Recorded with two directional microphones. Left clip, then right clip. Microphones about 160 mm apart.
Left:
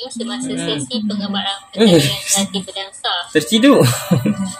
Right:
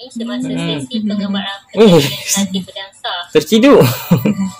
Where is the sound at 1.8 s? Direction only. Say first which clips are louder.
Right 4 dB; 35° right (ahead or behind).